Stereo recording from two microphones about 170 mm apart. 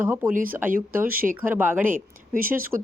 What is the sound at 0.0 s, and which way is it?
Speech, 10° right (ahead or behind).